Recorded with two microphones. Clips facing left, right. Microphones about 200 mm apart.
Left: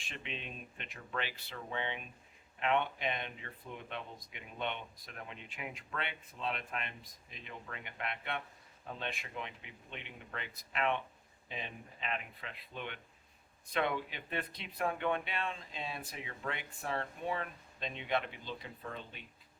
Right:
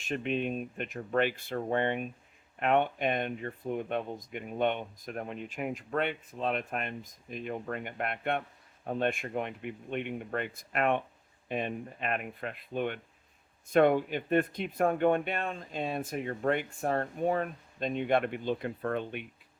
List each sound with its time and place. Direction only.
0.0 s speech: 45° right (ahead or behind); by 19.2 s 60° right (ahead or behind)